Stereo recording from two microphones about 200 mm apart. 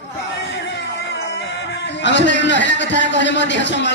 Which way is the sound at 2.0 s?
60° left (ahead or behind).